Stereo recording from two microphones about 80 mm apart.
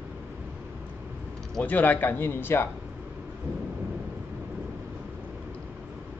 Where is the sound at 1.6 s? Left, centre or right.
Left.